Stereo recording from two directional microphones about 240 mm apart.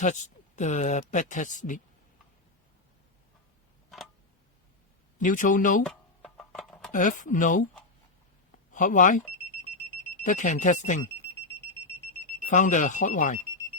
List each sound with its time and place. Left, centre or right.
0.0 s speech: left
5.1 s speech: left
5.8 s a sound: centre
6.9 s speech: left
8.7 s speech: left
10.2 s speech: left
12.5 s speech: left